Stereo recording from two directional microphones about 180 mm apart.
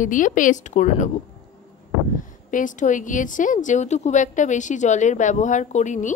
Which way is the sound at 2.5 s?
45° left (ahead or behind).